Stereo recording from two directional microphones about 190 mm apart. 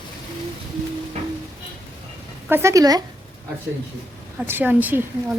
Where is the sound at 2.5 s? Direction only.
15° right (ahead or behind).